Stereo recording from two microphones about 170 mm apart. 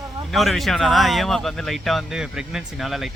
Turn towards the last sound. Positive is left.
turn(degrees=0)  # may be behind; listen again after turning